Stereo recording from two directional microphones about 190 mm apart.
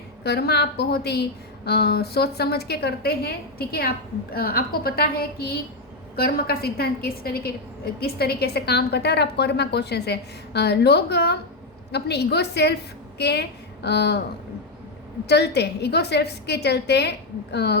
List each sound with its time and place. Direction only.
0.3 s a woman's voice: 60° left (ahead or behind)
15.3 s a woman's voice: 60° left (ahead or behind)